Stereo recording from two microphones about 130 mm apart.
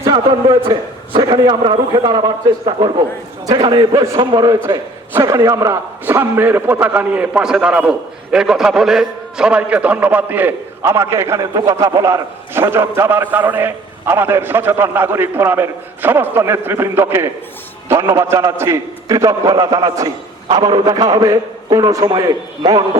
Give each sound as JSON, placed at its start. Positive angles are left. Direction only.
{"t": 0.0, "sound": "a man's voice", "side_deg": -40}